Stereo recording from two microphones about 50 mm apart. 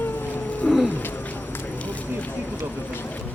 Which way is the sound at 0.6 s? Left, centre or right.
Left.